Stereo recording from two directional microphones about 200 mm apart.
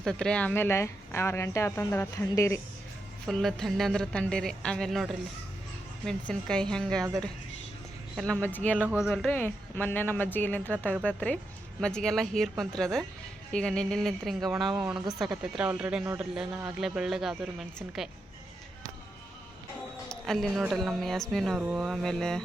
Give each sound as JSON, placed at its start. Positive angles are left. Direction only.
{"t": 0.0, "sound": "speech", "side_deg": 5}
{"t": 3.2, "sound": "speech", "side_deg": 0}
{"t": 7.0, "sound": "speech", "side_deg": -20}
{"t": 8.1, "sound": "speech", "side_deg": 5}
{"t": 8.8, "sound": "speech", "side_deg": -5}
{"t": 20.1, "sound": "speech", "side_deg": 0}